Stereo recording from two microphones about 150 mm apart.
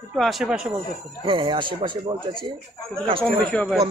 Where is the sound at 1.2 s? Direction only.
30° right (ahead or behind).